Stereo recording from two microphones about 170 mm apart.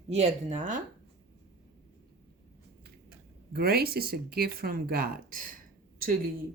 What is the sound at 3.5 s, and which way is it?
Speech, 65° right (ahead or behind).